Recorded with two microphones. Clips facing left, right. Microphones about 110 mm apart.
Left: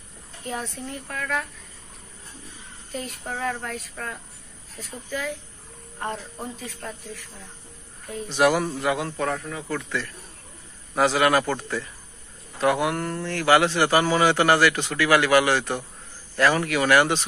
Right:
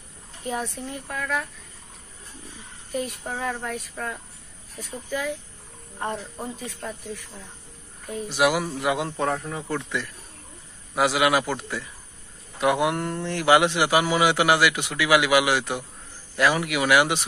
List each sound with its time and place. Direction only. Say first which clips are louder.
0.5 s a man's voice: right 2 dB; 20° right (ahead or behind)
2.9 s a man's voice: right 3 dB; 20° right (ahead or behind)
8.3 s a man's voice: left 2 dB; 10° right (ahead or behind)
8.8 s a man's voice: even; 20° right (ahead or behind)